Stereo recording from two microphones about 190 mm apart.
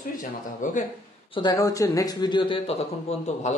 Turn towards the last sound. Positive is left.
turn(degrees=35)  # may be behind; listen again after turning